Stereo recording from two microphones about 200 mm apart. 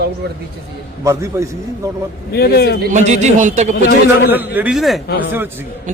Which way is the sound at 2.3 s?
50° left (ahead or behind).